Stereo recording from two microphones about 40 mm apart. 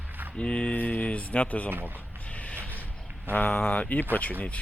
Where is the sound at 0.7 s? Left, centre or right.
Left.